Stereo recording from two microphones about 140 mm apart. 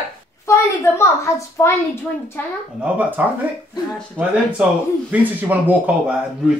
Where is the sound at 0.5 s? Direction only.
20° left (ahead or behind).